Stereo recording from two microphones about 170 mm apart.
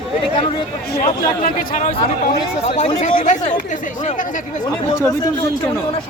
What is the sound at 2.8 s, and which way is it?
Speech, 45° left (ahead or behind).